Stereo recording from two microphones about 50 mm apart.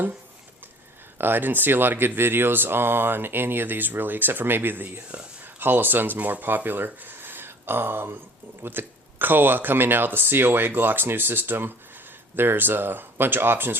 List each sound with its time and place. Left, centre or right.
1.2 s speech: right